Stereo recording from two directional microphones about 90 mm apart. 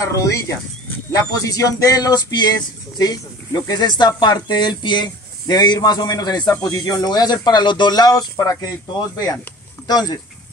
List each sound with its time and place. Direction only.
0.1 s speech: 40° left (ahead or behind)